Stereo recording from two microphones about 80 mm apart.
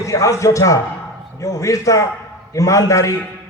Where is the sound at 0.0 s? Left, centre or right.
Left.